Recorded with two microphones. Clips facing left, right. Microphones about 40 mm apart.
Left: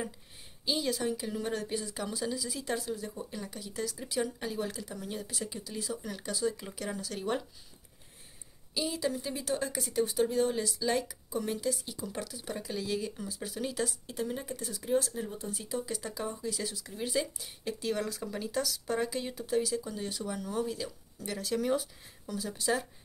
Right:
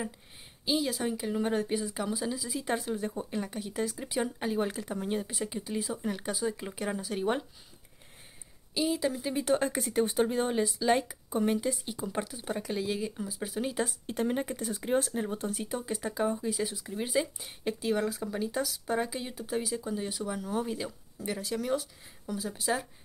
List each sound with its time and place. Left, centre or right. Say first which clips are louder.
0.7 s speech: right 2 dB; centre
1.0 s speech: right 3 dB; centre
2.6 s speech: right 6 dB; right
8.7 s speech: right 3 dB; centre
9.4 s speech: right 8 dB; right; by 13.8 s centre
13.8 s speech: right 4 dB; right
15.6 s speech: right 2 dB; right; by 22.8 s centre